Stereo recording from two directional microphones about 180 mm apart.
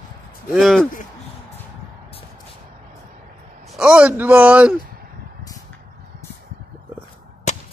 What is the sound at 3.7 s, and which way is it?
A man's voice, 5° right (ahead or behind).